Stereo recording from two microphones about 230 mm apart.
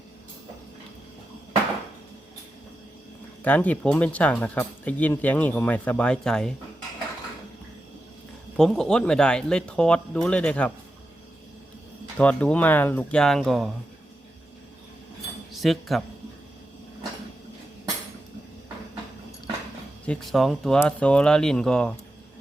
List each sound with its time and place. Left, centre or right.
3.4 s speech: centre
8.5 s speech: centre
12.1 s speech: centre
15.5 s speech: centre
20.1 s speech: centre